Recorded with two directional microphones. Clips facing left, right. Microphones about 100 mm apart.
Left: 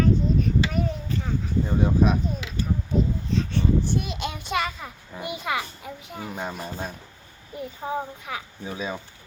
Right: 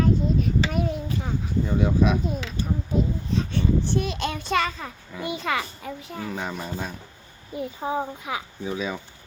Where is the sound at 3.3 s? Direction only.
5° right (ahead or behind).